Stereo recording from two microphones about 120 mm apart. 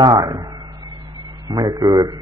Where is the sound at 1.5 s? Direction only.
35° right (ahead or behind).